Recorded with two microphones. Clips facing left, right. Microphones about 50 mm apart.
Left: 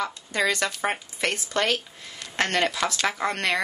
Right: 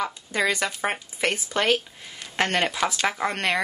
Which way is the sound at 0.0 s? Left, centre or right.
Centre.